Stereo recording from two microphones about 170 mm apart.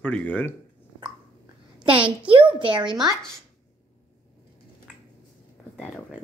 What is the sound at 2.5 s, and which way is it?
Speech, 30° right (ahead or behind).